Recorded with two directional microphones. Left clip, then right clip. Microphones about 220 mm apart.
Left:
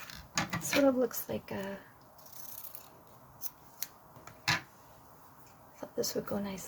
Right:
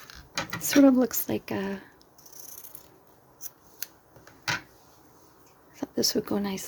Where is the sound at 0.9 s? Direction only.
45° right (ahead or behind).